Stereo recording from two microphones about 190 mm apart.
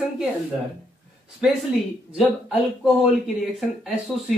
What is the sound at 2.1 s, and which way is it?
Speech, 5° right (ahead or behind).